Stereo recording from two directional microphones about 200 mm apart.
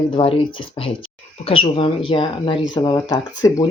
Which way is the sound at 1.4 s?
30° left (ahead or behind).